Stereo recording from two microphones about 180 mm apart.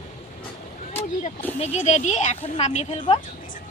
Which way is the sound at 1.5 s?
35° left (ahead or behind).